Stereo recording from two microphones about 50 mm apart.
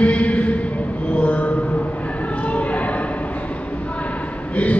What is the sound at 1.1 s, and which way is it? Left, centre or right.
Mantra, left.